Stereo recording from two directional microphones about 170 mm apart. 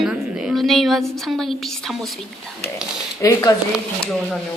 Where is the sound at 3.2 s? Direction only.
20° left (ahead or behind).